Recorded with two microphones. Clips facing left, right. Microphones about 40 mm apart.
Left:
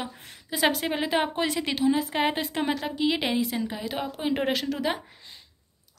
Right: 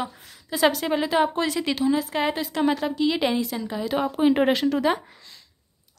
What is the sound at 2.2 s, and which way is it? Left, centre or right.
Speech, left.